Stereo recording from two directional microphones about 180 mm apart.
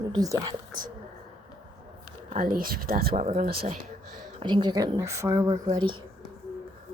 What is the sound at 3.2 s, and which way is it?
Speech, 40° right (ahead or behind).